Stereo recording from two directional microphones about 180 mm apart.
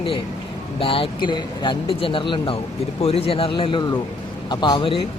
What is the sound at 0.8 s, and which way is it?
Speech, 30° left (ahead or behind).